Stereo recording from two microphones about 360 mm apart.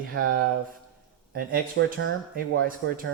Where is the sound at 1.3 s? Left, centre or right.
Right.